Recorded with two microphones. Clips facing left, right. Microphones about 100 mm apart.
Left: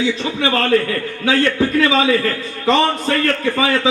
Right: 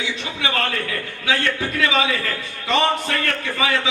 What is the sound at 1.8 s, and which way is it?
A man's voice, 35° left (ahead or behind).